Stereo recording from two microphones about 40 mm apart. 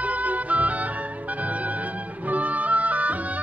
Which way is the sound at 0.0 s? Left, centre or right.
Right.